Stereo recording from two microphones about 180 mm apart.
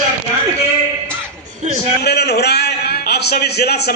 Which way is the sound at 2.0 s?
65° left (ahead or behind).